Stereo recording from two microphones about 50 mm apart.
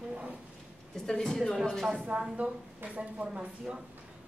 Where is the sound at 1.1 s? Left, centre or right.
Centre.